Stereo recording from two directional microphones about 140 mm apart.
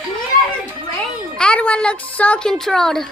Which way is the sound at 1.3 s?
5° left (ahead or behind).